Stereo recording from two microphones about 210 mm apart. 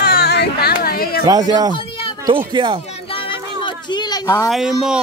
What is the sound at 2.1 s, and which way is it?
Speech, 15° right (ahead or behind).